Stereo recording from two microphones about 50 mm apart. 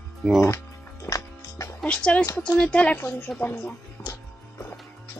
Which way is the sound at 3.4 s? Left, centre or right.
Left.